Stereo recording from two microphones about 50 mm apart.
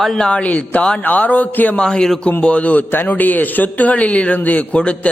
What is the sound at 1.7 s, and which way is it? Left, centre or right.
Speech, centre.